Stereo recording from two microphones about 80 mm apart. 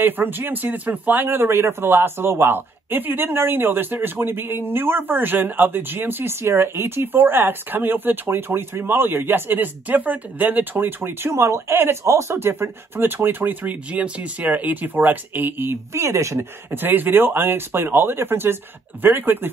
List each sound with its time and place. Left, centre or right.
0.0 s speech: right
16.7 s speech: right